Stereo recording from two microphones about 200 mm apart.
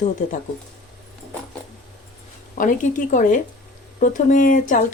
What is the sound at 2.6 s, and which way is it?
Speech, 40° left (ahead or behind).